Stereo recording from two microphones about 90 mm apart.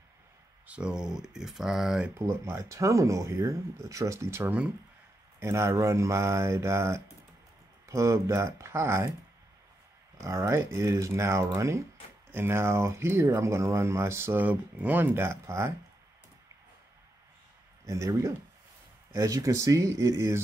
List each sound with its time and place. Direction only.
0.7 s speech: 10° right (ahead or behind)
2.1 s speech: 30° right (ahead or behind)
10.2 s speech: 35° right (ahead or behind)
17.8 s speech: 35° right (ahead or behind)